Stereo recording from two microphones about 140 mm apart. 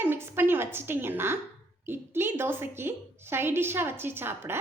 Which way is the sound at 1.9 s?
15° right (ahead or behind).